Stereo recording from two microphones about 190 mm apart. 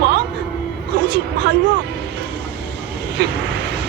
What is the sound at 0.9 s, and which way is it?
Music, 65° right (ahead or behind).